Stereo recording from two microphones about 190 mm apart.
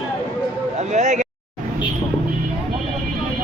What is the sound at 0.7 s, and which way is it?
Speech, 35° right (ahead or behind).